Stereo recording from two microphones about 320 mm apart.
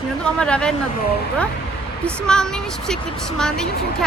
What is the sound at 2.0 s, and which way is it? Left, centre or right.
A woman's voice, centre.